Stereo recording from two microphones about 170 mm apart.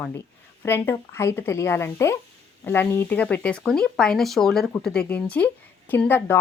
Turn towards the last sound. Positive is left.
turn(degrees=10)  # may be behind; listen again after turning